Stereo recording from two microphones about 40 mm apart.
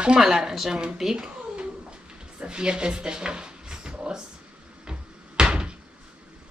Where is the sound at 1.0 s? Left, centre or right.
Centre.